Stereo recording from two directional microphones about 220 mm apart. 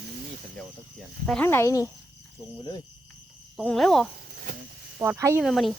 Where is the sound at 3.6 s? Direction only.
Centre (ahead or behind).